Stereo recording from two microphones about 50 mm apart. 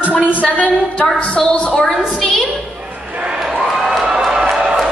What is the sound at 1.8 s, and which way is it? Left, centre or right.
Speech, centre.